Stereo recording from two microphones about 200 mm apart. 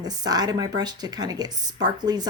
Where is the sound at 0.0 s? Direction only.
20° right (ahead or behind).